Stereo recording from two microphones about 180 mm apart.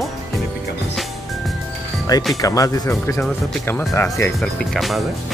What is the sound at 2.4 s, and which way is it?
Speech, 20° left (ahead or behind).